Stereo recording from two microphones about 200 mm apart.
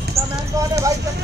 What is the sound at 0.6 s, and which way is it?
Clip-clop, 15° right (ahead or behind).